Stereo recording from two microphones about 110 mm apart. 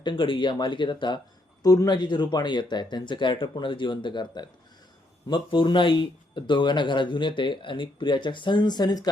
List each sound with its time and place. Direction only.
0.0 s speech: 50° left (ahead or behind)
1.6 s speech: 35° left (ahead or behind)